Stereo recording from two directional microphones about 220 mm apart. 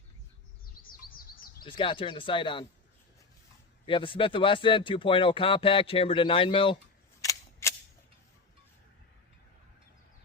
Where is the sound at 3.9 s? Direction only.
25° left (ahead or behind).